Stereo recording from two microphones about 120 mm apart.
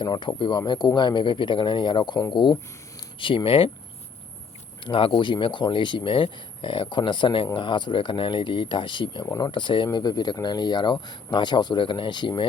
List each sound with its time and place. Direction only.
0.0 s speech: 35° left (ahead or behind)
4.9 s speech: 45° left (ahead or behind)